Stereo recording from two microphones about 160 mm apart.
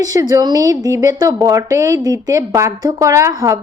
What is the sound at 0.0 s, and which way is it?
A woman's voice, 20° right (ahead or behind).